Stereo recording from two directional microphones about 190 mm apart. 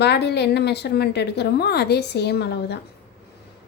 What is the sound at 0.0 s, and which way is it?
A woman's voice, 60° left (ahead or behind).